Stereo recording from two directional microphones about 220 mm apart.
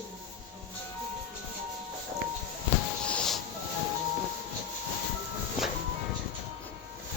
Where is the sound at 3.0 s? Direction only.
5° left (ahead or behind).